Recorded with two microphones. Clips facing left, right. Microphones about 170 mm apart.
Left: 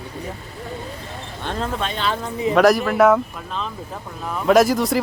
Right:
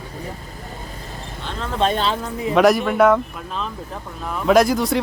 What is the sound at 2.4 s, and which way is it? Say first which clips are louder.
A man's voice: even; centre (ahead or behind).